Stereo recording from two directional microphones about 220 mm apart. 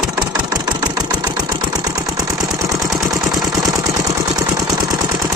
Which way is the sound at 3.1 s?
15° right (ahead or behind).